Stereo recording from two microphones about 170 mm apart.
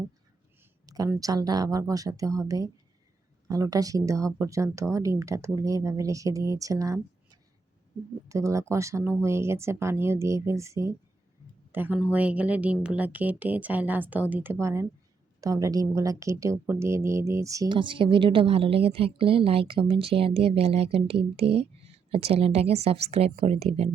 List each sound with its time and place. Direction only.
0.9 s a woman's voice: 20° right (ahead or behind); by 23.9 s 35° right (ahead or behind)